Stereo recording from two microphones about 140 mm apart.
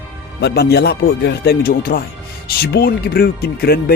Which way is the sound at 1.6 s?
90° left.